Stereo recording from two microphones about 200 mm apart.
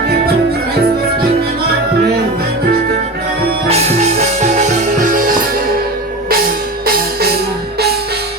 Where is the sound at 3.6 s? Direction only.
35° right (ahead or behind).